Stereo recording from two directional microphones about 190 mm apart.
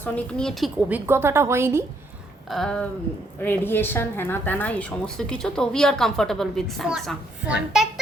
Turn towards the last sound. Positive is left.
turn(degrees=-5)  # may be behind; listen again after turning